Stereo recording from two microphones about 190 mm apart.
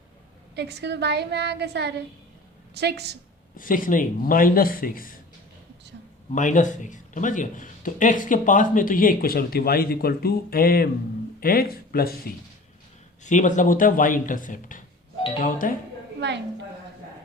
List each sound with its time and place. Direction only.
0.5 s a woman's voice: 60° right (ahead or behind)
3.6 s speech: 45° left (ahead or behind)
6.3 s speech: 40° left (ahead or behind)
13.2 s speech: 40° left (ahead or behind)